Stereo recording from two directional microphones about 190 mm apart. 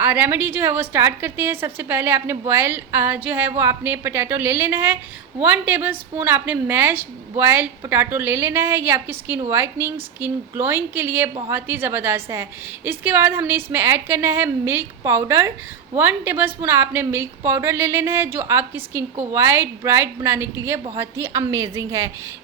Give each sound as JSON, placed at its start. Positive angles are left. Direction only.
{"t": 0.0, "sound": "a woman's voice", "side_deg": -10}